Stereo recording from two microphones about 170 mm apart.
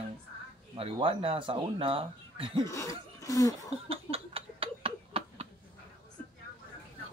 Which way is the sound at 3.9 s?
35° right (ahead or behind).